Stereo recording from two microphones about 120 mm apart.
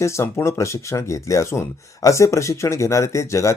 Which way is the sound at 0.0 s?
25° left (ahead or behind).